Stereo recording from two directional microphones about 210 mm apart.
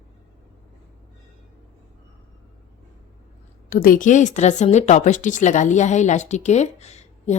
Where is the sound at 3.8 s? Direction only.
40° left (ahead or behind).